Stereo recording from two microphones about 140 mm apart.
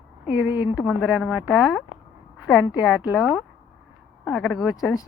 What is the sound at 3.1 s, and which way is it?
Speech, 5° right (ahead or behind).